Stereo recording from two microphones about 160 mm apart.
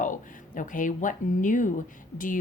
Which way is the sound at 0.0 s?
55° left (ahead or behind).